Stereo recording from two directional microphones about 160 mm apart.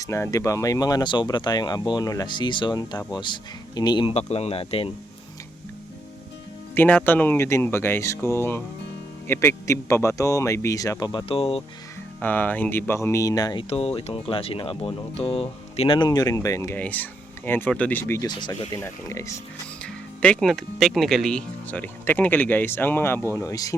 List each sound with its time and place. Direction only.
0.0 s speech: 20° left (ahead or behind)
4.1 s speech: 40° left (ahead or behind)
6.7 s speech: 10° left (ahead or behind); by 11.6 s 35° left (ahead or behind)
12.2 s speech: 10° left (ahead or behind)
13.7 s speech: 40° left (ahead or behind); by 19.3 s 20° left (ahead or behind)
19.8 s speech: 5° left (ahead or behind)